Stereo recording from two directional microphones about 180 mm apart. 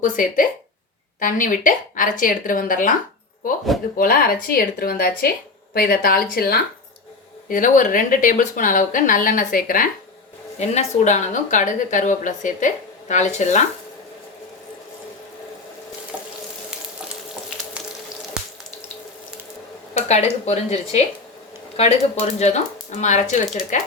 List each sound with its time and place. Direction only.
0.0 s speech: 50° left (ahead or behind)
3.9 s speech: 55° left (ahead or behind)
10.6 s speech: 40° left (ahead or behind)
16.1 s stir: 10° right (ahead or behind)
19.9 s speech: 40° left (ahead or behind)